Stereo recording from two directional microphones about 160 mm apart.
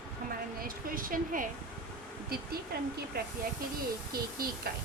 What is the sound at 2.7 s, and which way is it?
Speech, 75° right (ahead or behind).